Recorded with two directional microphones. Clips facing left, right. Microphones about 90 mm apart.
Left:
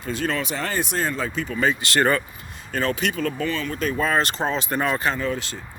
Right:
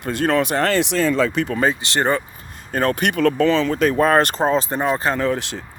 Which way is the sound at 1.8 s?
25° right (ahead or behind).